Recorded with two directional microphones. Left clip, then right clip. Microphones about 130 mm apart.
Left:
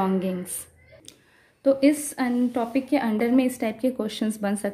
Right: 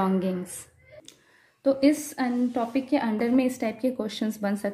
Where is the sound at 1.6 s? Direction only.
15° left (ahead or behind).